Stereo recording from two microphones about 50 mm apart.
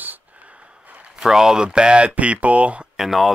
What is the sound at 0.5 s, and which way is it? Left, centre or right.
Snort, right.